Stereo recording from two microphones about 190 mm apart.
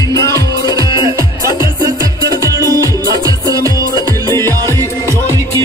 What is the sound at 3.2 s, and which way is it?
Music, 20° right (ahead or behind).